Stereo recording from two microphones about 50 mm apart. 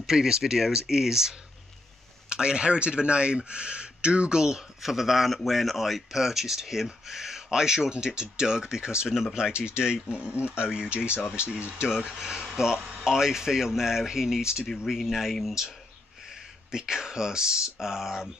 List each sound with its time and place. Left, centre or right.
0.0 s speech: centre
14.9 s a man's voice: centre
16.7 s speech: centre